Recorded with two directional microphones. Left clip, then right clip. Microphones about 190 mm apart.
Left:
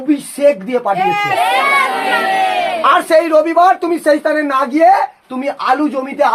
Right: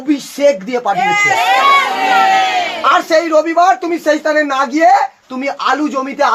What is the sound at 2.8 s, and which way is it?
A man's voice, 45° left (ahead or behind).